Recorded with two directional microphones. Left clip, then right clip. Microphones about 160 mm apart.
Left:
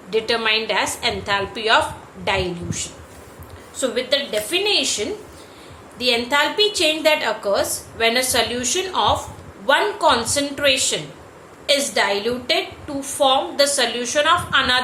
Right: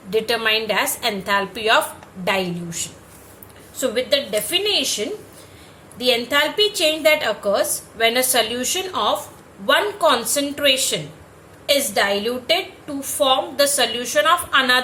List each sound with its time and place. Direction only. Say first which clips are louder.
0.1 s a woman's voice: even; 30° right (ahead or behind)
6.0 s a woman's voice: even; 25° right (ahead or behind)